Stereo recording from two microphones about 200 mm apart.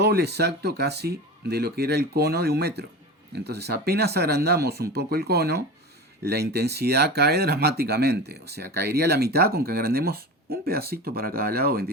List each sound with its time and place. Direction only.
0.0 s speech: 55° right (ahead or behind)